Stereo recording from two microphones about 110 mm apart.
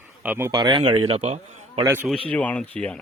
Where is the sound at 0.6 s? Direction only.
45° right (ahead or behind).